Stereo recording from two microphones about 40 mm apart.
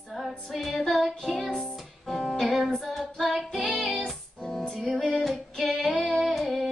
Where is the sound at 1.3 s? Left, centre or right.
Centre.